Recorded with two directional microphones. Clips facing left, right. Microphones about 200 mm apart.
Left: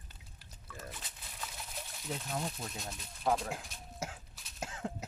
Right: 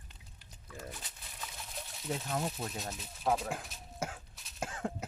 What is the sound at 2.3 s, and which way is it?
Speech, 65° right (ahead or behind).